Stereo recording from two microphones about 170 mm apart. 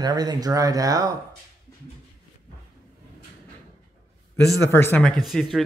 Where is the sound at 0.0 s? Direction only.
25° right (ahead or behind).